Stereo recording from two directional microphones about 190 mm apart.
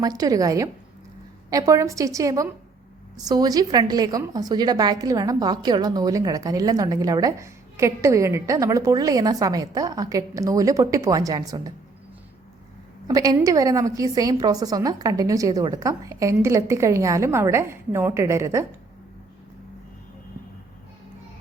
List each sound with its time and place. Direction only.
0.0 s a woman's voice: 20° right (ahead or behind)
13.1 s a woman's voice: 20° right (ahead or behind)